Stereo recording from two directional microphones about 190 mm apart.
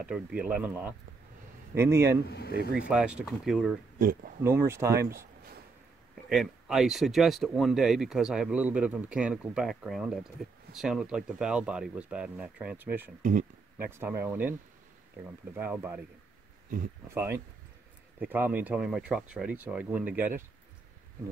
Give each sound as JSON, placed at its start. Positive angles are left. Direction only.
{"t": 0.0, "sound": "speech", "side_deg": -5}
{"t": 2.2, "sound": "speech", "side_deg": 60}
{"t": 2.9, "sound": "speech", "side_deg": -5}
{"t": 4.4, "sound": "speech", "side_deg": -15}
{"t": 6.3, "sound": "speech", "side_deg": 0}
{"t": 13.2, "sound": "speech", "side_deg": -45}
{"t": 13.8, "sound": "speech", "side_deg": -10}
{"t": 16.7, "sound": "speech", "side_deg": -45}
{"t": 17.1, "sound": "speech", "side_deg": -15}